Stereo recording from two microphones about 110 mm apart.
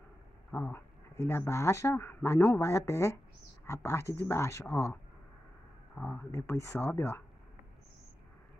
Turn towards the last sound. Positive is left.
turn(degrees=20)  # may be behind; listen again after turning